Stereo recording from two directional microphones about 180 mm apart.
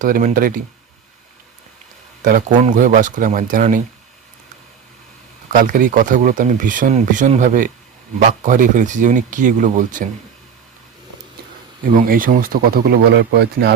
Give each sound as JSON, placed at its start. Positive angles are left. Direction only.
{"t": 0.0, "sound": "speech", "side_deg": -45}
{"t": 2.2, "sound": "speech", "side_deg": -45}
{"t": 5.5, "sound": "speech", "side_deg": -50}
{"t": 11.9, "sound": "speech", "side_deg": -50}